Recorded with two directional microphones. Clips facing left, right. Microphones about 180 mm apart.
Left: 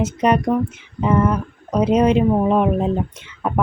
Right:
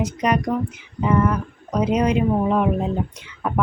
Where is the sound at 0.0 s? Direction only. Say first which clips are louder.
Left 4 dB; 25° left (ahead or behind).